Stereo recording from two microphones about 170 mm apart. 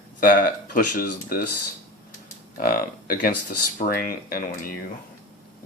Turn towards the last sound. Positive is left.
turn(degrees=60)  # may be behind; listen again after turning